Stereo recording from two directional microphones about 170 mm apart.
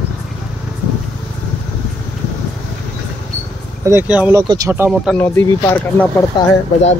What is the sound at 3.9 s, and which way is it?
Speech, 10° right (ahead or behind).